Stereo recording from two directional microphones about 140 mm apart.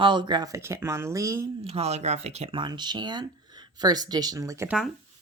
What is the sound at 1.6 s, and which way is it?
Speech, 50° right (ahead or behind).